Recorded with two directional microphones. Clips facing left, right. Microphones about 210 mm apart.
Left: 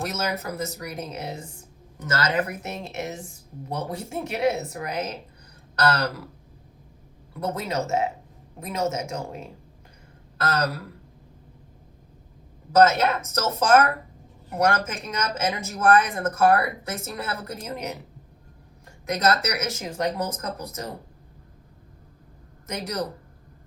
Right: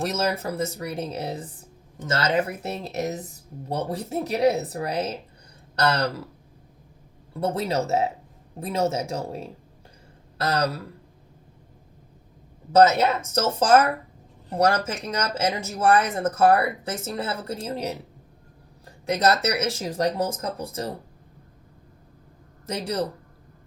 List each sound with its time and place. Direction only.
0.0 s speech: 30° right (ahead or behind)
7.3 s speech: 30° right (ahead or behind)
10.5 s speech: 30° right (ahead or behind)
12.7 s speech: 30° right (ahead or behind)
22.6 s a man's voice: 30° right (ahead or behind)